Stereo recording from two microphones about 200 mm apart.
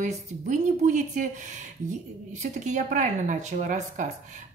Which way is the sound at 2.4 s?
35° right (ahead or behind).